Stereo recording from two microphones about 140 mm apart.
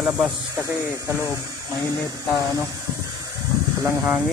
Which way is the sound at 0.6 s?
20° left (ahead or behind).